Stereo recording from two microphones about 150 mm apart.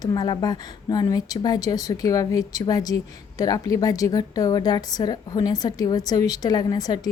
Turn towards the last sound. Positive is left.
turn(degrees=25)  # may be behind; listen again after turning